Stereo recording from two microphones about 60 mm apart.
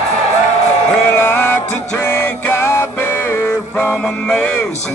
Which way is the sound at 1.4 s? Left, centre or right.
Left.